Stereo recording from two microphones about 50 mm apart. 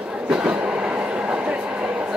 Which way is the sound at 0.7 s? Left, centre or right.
Centre.